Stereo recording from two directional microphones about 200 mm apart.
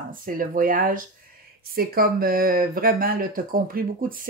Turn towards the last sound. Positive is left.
turn(degrees=-45)  # may be behind; listen again after turning